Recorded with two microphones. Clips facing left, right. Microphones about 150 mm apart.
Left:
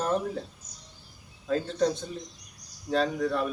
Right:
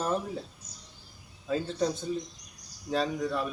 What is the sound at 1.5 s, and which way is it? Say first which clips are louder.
Speech: left 3 dB; 5° right (ahead or behind).